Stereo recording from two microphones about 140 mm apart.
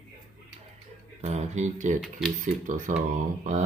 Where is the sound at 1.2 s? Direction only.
55° right (ahead or behind).